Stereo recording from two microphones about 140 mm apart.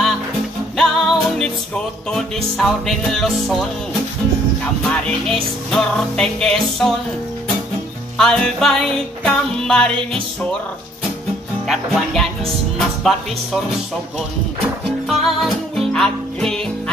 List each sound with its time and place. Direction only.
0.7 s music: centre (ahead or behind)
2.5 s music: centre (ahead or behind)
5.0 s music: 5° left (ahead or behind)
8.2 s music: 5° left (ahead or behind)
11.6 s music: centre (ahead or behind)
15.0 s music: centre (ahead or behind)